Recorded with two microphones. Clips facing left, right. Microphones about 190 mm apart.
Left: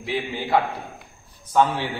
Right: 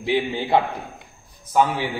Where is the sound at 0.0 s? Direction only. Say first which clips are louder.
Right 5 dB; 25° right (ahead or behind).